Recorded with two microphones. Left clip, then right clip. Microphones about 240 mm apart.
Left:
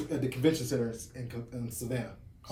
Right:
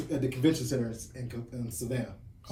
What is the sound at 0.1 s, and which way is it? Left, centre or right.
Speech, centre.